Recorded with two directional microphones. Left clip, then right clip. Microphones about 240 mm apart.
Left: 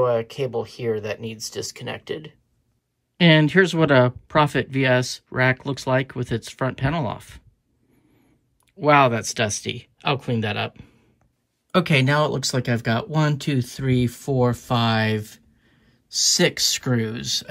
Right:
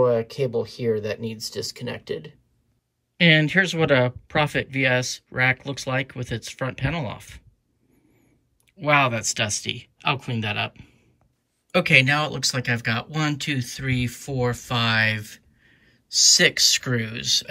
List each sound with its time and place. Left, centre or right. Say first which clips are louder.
0.0 s speech: right 1 dB; centre
3.3 s speech: left 2 dB; centre
8.7 s speech: left 3 dB; centre